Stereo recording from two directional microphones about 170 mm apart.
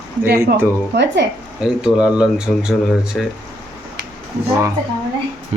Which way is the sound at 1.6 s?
5° right (ahead or behind).